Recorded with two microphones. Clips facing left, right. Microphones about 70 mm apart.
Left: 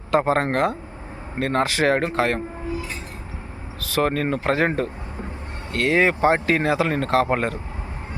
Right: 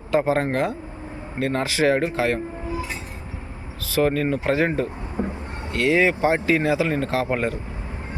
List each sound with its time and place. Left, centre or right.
0.2 s speech: left
3.8 s speech: left
5.2 s vehicle: right
5.7 s speech: left